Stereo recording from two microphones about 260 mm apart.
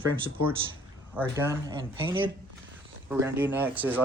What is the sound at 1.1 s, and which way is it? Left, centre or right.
Speech, centre.